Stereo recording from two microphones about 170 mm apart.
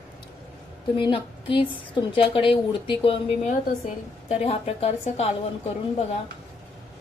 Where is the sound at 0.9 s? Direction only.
30° left (ahead or behind).